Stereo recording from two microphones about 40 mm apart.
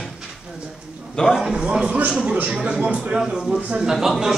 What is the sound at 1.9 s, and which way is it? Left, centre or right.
A man's voice, right.